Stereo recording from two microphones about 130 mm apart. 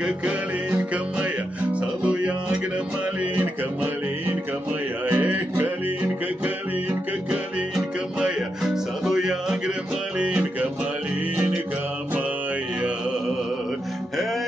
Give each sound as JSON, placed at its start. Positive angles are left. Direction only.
{"t": 1.7, "sound": "music", "side_deg": -10}
{"t": 5.0, "sound": "music", "side_deg": -15}
{"t": 7.7, "sound": "music", "side_deg": -5}